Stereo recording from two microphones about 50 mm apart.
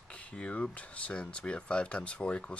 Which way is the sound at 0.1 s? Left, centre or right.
Left.